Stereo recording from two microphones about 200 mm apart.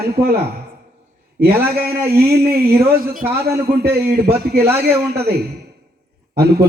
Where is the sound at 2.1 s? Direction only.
50° right (ahead or behind).